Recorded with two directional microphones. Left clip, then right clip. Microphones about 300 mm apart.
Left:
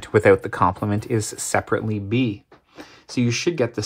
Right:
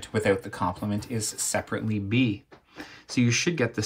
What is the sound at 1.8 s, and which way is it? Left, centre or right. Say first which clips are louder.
Speech: left 3 dB; left.